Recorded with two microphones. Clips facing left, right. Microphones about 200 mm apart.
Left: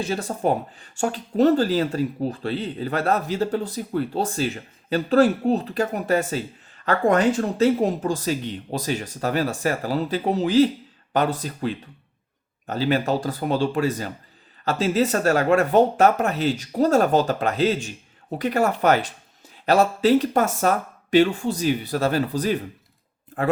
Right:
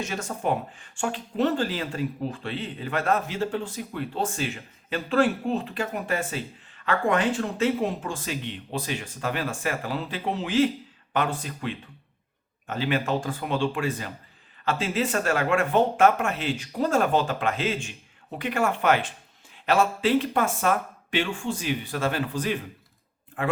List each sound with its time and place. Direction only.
0.0 s speech: 35° left (ahead or behind)